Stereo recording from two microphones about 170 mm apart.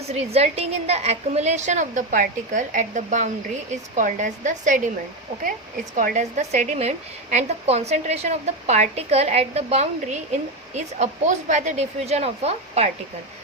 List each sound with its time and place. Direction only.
0.1 s a woman's voice: 40° right (ahead or behind)
6.0 s a woman's voice: 50° right (ahead or behind)